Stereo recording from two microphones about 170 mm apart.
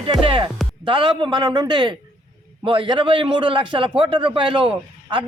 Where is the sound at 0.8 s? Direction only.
30° right (ahead or behind).